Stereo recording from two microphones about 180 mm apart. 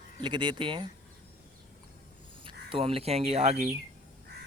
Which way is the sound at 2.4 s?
30° right (ahead or behind).